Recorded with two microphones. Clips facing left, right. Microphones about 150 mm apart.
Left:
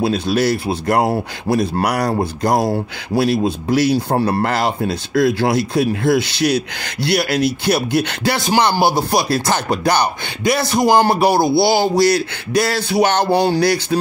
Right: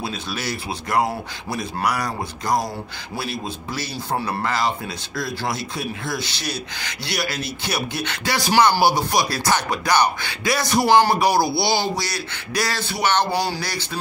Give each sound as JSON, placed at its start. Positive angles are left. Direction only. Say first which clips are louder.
{"t": 0.0, "sound": "a man's voice", "louder": "left 12 dB", "side_deg": 60}
{"t": 8.7, "sound": "speech", "louder": "left 3 dB", "side_deg": 25}
{"t": 10.9, "sound": "speech", "louder": "left 2 dB", "side_deg": 40}
{"t": 11.2, "sound": "speech", "louder": "left 5 dB", "side_deg": 25}
{"t": 11.7, "sound": "a man's voice", "louder": "left 10 dB", "side_deg": 55}